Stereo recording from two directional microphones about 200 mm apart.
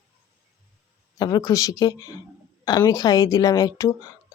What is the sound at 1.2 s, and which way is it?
Speech, 20° left (ahead or behind).